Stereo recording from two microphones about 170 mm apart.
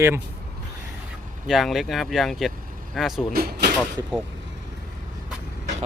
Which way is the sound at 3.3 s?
65° right (ahead or behind).